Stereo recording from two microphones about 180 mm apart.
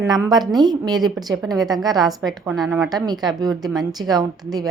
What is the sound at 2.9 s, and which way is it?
Speech, 20° right (ahead or behind).